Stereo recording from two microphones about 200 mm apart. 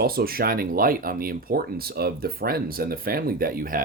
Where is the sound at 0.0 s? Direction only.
50° right (ahead or behind).